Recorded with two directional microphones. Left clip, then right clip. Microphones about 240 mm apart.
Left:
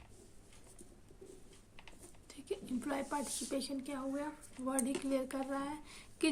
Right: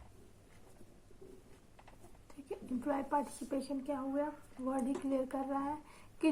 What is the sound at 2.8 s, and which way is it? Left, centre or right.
A woman's voice, left.